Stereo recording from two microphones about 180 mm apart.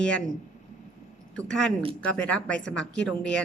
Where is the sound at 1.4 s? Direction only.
5° left (ahead or behind).